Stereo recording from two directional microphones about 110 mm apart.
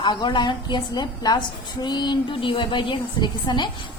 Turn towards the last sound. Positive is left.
turn(degrees=45)  # may be behind; listen again after turning